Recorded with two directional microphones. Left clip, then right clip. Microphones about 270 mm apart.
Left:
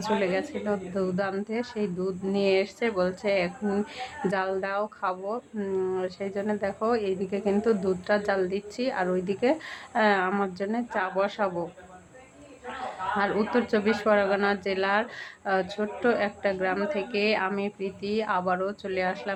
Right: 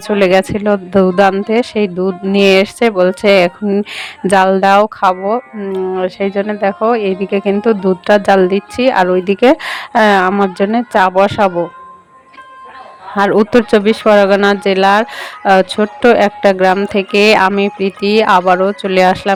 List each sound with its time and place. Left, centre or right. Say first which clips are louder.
0.2 s speech: right 17 dB; right
13.1 s speech: right 17 dB; right